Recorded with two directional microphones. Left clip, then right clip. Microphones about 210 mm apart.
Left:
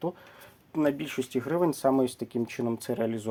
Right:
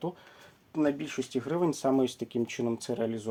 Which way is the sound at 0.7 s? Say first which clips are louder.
Left 2 dB; 40° left (ahead or behind).